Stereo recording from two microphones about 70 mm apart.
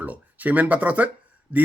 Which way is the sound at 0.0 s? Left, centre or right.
Right.